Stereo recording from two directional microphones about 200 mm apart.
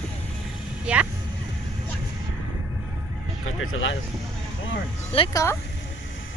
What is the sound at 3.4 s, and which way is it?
Speech, 90° left.